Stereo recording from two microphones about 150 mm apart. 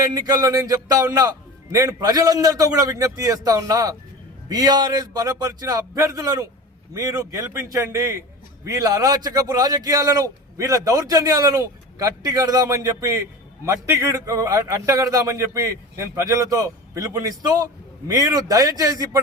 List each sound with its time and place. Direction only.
0.0 s a man's voice: 25° right (ahead or behind)